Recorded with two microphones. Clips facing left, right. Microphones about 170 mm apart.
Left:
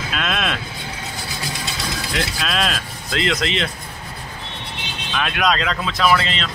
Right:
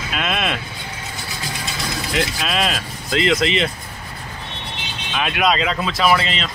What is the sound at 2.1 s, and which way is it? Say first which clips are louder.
Speech: right 2 dB; 5° right (ahead or behind).